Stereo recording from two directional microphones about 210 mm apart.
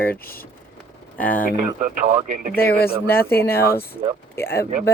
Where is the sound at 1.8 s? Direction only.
35° right (ahead or behind).